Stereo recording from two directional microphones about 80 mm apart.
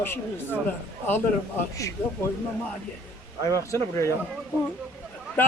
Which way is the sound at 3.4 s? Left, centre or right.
Left.